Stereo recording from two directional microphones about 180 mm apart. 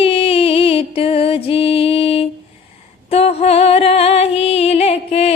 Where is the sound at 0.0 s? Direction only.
30° left (ahead or behind).